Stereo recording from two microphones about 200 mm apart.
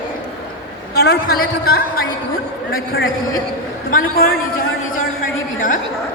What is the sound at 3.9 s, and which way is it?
A man's voice, 45° left (ahead or behind).